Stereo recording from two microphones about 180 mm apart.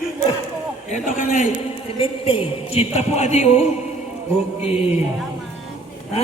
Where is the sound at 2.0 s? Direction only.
30° left (ahead or behind).